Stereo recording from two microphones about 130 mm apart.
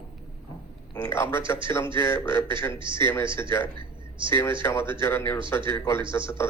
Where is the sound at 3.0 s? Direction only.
15° left (ahead or behind).